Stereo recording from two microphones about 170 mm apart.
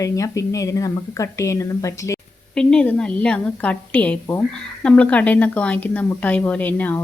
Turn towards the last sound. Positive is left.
turn(degrees=10)  # may be behind; listen again after turning